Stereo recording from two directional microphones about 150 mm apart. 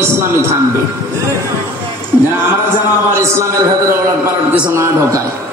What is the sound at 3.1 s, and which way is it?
A man's voice, 20° right (ahead or behind).